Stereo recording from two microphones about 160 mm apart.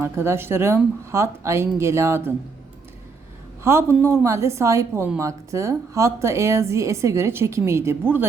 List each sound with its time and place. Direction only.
0.0 s a woman's voice: 15° right (ahead or behind)
3.6 s a man's voice: 15° right (ahead or behind)